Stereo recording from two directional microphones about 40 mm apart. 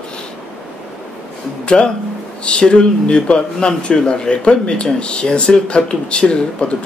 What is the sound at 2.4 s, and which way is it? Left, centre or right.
Speech, left.